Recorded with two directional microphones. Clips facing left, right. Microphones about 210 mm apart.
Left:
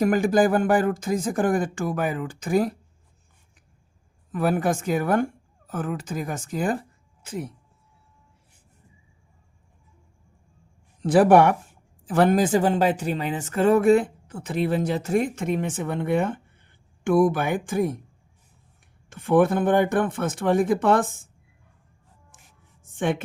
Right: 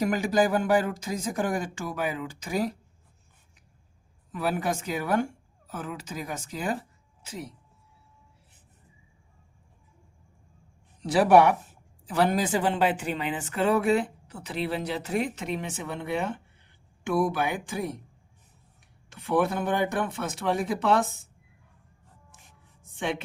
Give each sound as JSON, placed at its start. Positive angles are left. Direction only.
{"t": 0.0, "sound": "speech", "side_deg": 50}
{"t": 4.3, "sound": "speech", "side_deg": 50}
{"t": 11.0, "sound": "speech", "side_deg": 50}
{"t": 19.1, "sound": "speech", "side_deg": 50}
{"t": 22.8, "sound": "a sound", "side_deg": 50}